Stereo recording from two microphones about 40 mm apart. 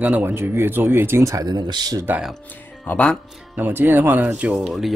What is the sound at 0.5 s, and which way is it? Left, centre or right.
Speech, right.